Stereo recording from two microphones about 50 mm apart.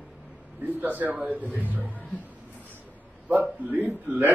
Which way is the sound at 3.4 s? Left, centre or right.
Right.